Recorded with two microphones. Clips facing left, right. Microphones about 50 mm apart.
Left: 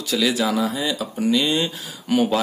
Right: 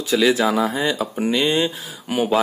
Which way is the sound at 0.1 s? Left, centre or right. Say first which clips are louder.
Right 4 dB; right.